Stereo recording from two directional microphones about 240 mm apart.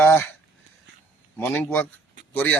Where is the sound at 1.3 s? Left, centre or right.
Centre.